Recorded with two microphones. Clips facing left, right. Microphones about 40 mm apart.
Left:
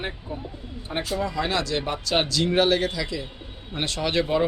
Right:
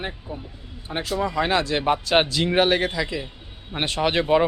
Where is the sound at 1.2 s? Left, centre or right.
Right.